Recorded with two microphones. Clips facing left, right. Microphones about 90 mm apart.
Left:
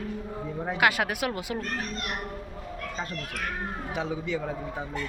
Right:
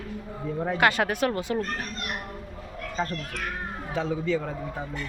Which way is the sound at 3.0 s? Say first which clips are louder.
Right 6 dB; 10° left (ahead or behind).